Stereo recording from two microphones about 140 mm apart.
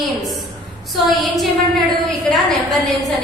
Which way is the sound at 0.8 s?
Centre (ahead or behind).